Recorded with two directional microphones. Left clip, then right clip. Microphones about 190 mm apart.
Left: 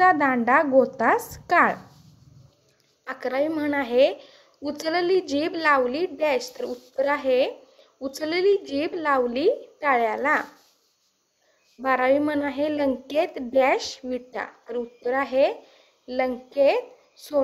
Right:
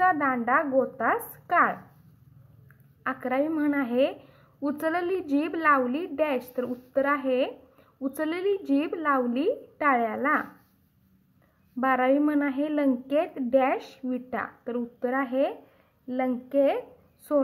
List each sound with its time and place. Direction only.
0.0 s a woman's voice: 35° left (ahead or behind)
3.2 s a woman's voice: 35° left (ahead or behind)
11.8 s a woman's voice: 40° left (ahead or behind)